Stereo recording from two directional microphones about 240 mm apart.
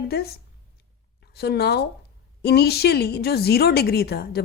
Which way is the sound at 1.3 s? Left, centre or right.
Left.